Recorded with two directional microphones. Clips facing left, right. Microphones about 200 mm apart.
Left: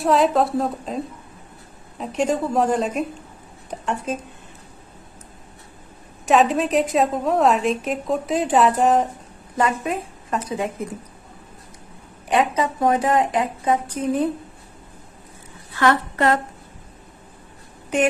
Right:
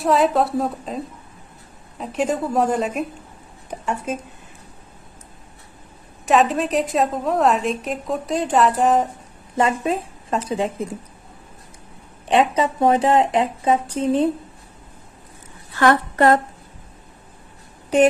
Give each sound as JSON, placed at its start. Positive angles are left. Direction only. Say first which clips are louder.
{"t": 0.0, "sound": "a woman's voice", "louder": "even", "side_deg": 0}
{"t": 6.2, "sound": "a woman's voice", "louder": "even", "side_deg": 0}
{"t": 9.6, "sound": "a woman's voice", "louder": "right 2 dB", "side_deg": -25}
{"t": 12.3, "sound": "a woman's voice", "louder": "right 2 dB", "side_deg": -25}
{"t": 15.8, "sound": "a woman's voice", "louder": "right 3 dB", "side_deg": -45}